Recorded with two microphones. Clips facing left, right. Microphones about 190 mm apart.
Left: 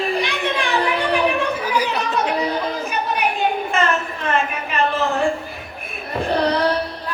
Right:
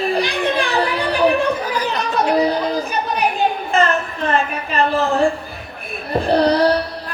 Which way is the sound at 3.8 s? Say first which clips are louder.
Right 4 dB; 35° right (ahead or behind).